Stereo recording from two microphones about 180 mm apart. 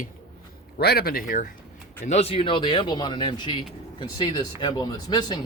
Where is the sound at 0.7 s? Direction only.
60° left (ahead or behind).